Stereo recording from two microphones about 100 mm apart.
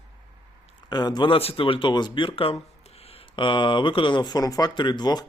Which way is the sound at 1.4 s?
70° left (ahead or behind).